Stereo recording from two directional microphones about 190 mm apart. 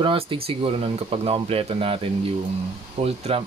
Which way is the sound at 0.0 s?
25° right (ahead or behind).